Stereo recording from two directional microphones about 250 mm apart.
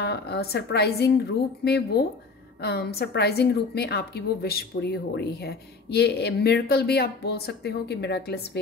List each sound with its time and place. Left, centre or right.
0.0 s a woman's voice: left